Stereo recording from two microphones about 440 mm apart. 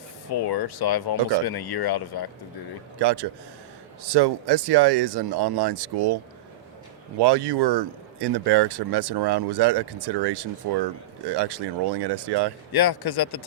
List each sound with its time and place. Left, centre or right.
0.3 s speech: left
3.0 s speech: right
7.2 s speech: right
12.7 s speech: left